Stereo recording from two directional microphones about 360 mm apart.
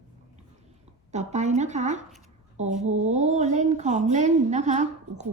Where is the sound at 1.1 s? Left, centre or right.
Centre.